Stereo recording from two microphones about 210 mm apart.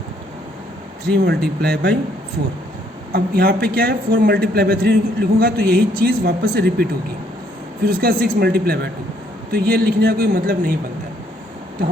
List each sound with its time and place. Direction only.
1.0 s a man's voice: 50° right (ahead or behind)
3.1 s a man's voice: 45° right (ahead or behind)
7.9 s a man's voice: 45° right (ahead or behind)